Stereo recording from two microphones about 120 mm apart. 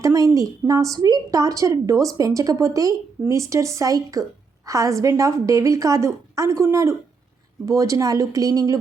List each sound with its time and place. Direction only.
0.0 s a woman's voice: 25° right (ahead or behind)